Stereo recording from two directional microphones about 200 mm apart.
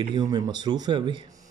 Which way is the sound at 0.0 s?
25° right (ahead or behind).